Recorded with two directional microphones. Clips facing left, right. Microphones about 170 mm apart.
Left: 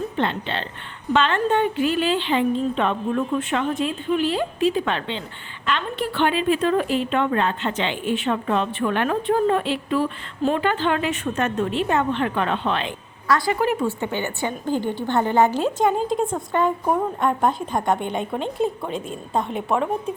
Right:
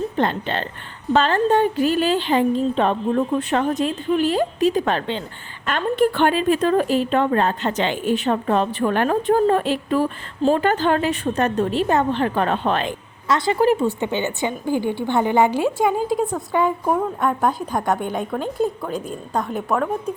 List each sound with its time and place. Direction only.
0.2 s a woman's voice: 45° right (ahead or behind)
13.2 s a woman's voice: 20° right (ahead or behind); by 19.1 s centre (ahead or behind)
19.3 s a woman's voice: 25° left (ahead or behind)
19.5 s a woman's voice: 5° left (ahead or behind)